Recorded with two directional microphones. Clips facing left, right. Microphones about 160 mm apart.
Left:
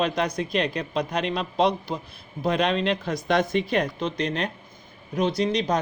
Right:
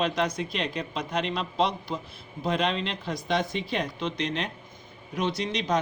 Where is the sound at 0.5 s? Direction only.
60° left (ahead or behind).